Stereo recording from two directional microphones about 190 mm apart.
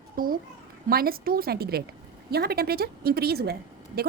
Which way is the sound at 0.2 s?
50° right (ahead or behind).